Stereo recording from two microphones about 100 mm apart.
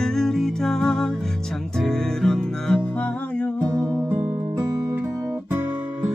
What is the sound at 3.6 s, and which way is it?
Music, 35° right (ahead or behind).